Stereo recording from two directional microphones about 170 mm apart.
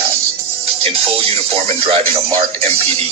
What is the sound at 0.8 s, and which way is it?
Speech, 35° right (ahead or behind).